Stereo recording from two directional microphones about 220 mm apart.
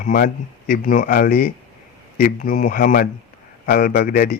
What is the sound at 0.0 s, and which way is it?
Speech, 40° left (ahead or behind).